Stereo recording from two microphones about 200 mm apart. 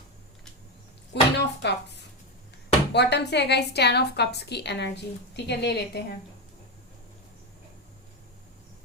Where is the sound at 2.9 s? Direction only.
60° left (ahead or behind).